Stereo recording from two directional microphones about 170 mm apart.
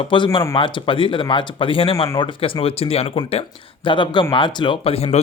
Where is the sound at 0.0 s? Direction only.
30° left (ahead or behind).